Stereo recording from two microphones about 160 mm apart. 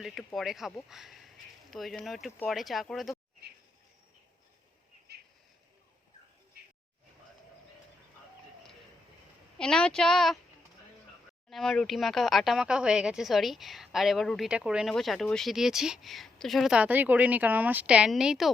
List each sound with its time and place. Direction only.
0.0 s speech: centre (ahead or behind)
5.1 s bird: 90° right
9.6 s speech: 5° left (ahead or behind)
11.4 s speech: centre (ahead or behind)